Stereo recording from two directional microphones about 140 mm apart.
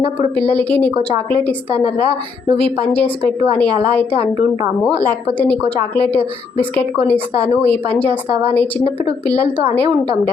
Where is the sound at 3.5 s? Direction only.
10° left (ahead or behind).